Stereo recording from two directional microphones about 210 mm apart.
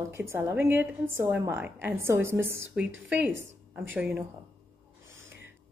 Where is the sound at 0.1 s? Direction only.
10° right (ahead or behind).